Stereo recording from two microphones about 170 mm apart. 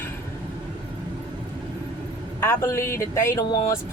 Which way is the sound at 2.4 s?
15° left (ahead or behind).